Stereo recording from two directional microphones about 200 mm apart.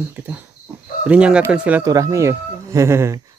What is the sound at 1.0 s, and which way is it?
Speech, 5° right (ahead or behind).